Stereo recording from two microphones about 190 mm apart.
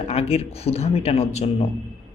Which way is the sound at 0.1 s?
30° left (ahead or behind).